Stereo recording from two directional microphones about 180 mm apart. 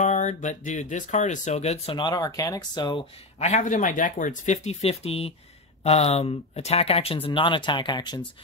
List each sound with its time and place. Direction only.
0.0 s speech: 40° left (ahead or behind); by 8.3 s 25° left (ahead or behind)